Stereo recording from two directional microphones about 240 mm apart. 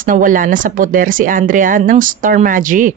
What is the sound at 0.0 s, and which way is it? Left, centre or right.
A woman's voice, right.